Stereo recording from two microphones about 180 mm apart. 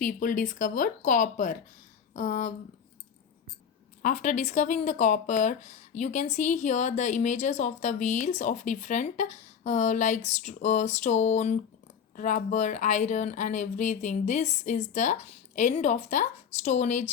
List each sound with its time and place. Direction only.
0.0 s speech: 45° left (ahead or behind)
4.0 s speech: 40° left (ahead or behind)
10.2 s a sound: 40° left (ahead or behind)
12.1 s speech: 45° left (ahead or behind)